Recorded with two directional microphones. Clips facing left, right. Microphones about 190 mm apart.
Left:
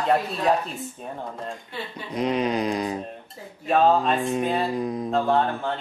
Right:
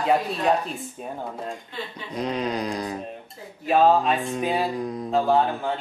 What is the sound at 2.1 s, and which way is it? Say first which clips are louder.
Speech: left 3 dB; 20° left (ahead or behind).